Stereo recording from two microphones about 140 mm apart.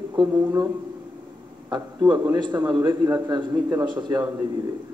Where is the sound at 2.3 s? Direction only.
30° right (ahead or behind).